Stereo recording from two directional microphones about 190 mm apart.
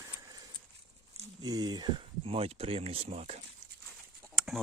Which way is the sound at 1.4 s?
20° right (ahead or behind).